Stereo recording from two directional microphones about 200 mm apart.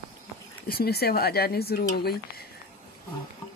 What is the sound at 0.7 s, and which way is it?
Speech, 50° left (ahead or behind).